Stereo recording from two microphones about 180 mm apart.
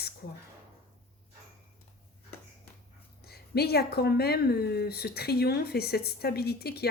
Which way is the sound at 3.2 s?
60° left (ahead or behind).